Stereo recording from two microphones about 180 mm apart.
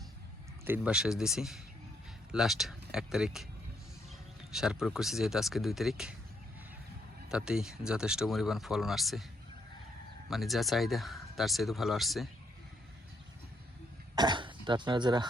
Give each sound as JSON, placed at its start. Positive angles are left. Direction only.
{"t": 0.6, "sound": "speech", "side_deg": -10}
{"t": 4.5, "sound": "speech", "side_deg": -5}
{"t": 7.3, "sound": "speech", "side_deg": -5}
{"t": 10.2, "sound": "speech", "side_deg": 0}
{"t": 14.2, "sound": "speech", "side_deg": -25}